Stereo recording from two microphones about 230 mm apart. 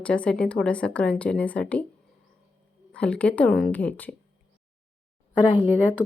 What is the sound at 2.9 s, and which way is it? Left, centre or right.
Speech, centre.